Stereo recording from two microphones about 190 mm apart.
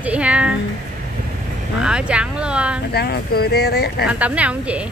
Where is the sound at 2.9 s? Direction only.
60° left (ahead or behind).